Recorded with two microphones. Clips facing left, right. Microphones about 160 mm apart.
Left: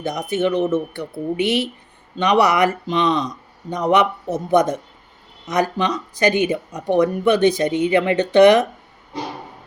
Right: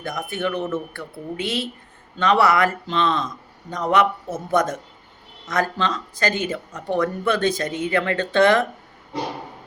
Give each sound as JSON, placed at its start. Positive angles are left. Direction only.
{"t": 0.0, "sound": "speech", "side_deg": 20}